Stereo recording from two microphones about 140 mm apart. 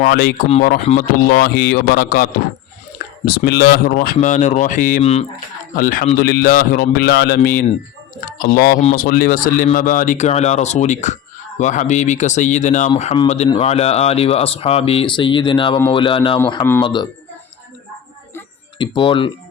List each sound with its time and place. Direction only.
0.0 s speech: 90° left; by 5.0 s 70° left (ahead or behind)
5.7 s speech: 85° left; by 17.1 s 30° left (ahead or behind)
18.8 s speech: 35° left (ahead or behind)